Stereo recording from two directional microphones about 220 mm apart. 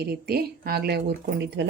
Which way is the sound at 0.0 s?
45° right (ahead or behind).